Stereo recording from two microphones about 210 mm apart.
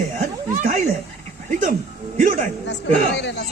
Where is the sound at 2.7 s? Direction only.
55° left (ahead or behind).